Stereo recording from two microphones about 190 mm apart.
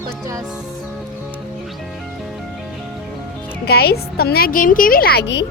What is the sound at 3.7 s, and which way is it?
A woman's voice, 55° left (ahead or behind).